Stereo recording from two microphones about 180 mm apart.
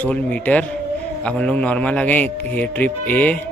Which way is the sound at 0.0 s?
10° left (ahead or behind).